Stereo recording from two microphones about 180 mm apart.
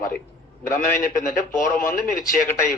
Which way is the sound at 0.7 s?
45° left (ahead or behind).